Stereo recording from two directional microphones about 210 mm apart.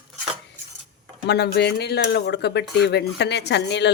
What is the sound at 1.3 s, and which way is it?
Speech, 55° left (ahead or behind).